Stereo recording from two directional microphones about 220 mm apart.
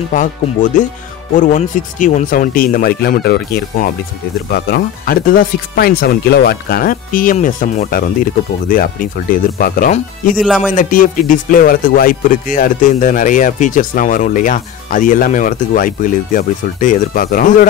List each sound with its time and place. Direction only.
0.1 s speech: 35° left (ahead or behind)
10.4 s speech: centre (ahead or behind)
10.7 s speech: 40° left (ahead or behind)